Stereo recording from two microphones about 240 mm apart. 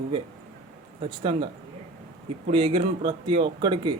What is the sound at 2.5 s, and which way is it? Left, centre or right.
Speech, right.